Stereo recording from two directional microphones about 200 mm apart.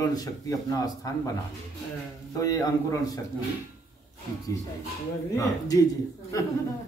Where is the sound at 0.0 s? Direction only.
20° left (ahead or behind).